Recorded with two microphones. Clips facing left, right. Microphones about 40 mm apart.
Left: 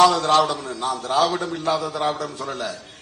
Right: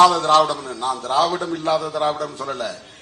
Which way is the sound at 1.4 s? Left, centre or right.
Centre.